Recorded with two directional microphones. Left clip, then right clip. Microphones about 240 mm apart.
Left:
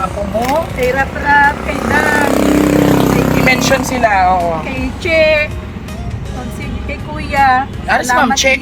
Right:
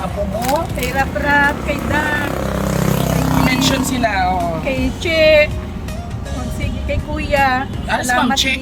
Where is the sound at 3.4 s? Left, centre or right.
Centre.